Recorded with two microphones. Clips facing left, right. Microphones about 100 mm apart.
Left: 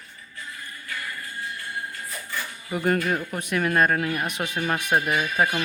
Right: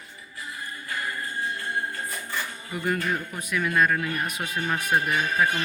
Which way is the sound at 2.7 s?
50° left (ahead or behind).